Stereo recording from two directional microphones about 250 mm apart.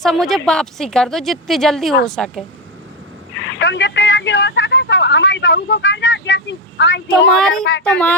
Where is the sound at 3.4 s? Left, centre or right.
Left.